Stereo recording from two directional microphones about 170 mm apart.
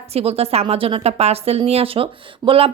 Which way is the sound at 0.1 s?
35° right (ahead or behind).